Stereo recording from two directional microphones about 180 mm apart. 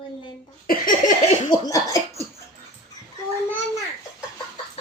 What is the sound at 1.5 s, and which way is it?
Cough, 25° left (ahead or behind).